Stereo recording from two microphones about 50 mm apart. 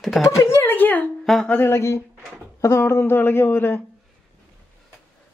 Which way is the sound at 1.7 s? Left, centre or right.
Left.